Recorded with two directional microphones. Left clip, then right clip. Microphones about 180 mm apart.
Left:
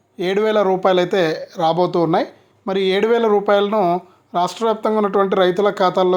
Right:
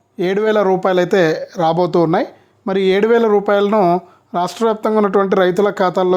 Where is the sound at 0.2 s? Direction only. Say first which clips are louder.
Right 2 dB; 35° right (ahead or behind).